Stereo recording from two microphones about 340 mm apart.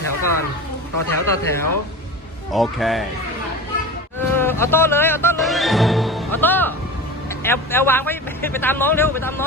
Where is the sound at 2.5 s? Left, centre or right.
Centre.